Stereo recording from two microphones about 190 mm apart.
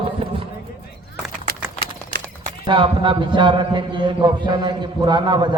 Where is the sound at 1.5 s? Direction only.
55° right (ahead or behind).